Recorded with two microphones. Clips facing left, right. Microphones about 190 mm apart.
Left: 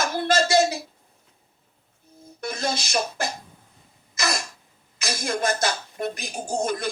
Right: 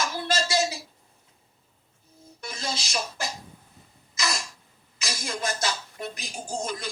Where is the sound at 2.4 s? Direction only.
55° left (ahead or behind).